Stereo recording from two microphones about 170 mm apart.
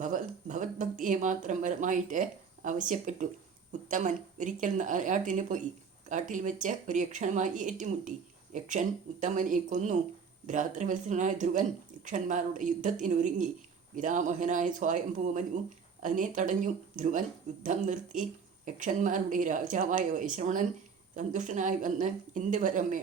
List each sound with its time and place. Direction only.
0.0 s a woman's voice: 50° right (ahead or behind)